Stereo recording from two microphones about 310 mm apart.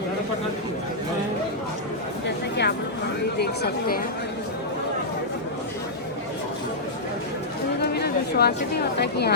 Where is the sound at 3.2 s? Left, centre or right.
Left.